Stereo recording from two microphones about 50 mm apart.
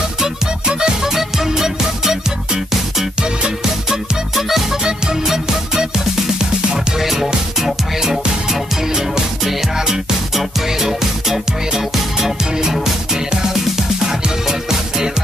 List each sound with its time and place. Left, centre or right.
0.2 s music: centre
4.4 s music: centre